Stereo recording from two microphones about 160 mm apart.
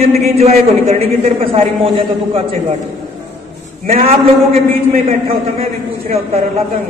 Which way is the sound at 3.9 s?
40° right (ahead or behind).